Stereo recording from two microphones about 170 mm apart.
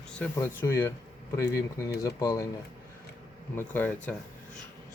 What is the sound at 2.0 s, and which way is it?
Speech, 20° left (ahead or behind).